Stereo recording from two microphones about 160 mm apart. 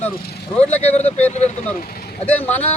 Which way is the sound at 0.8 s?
40° left (ahead or behind).